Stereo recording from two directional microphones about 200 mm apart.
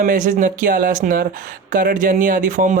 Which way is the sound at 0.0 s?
40° right (ahead or behind).